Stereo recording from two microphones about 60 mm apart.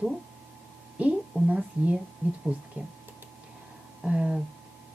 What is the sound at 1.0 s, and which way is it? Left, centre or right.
A woman's voice, centre.